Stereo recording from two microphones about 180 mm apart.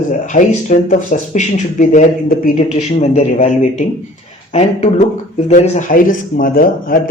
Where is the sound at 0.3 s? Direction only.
45° left (ahead or behind).